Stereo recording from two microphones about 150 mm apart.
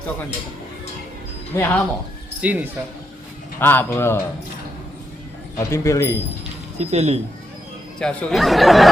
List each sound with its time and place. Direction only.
1.5 s speech: 15° left (ahead or behind)
2.4 s speech: 10° right (ahead or behind)
3.6 s speech: 15° left (ahead or behind)
5.5 s speech: 20° left (ahead or behind)
6.7 s speech: 45° right (ahead or behind)
7.9 s speech: centre (ahead or behind)